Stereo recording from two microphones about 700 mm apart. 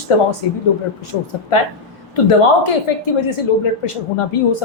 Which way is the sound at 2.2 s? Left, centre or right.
Left.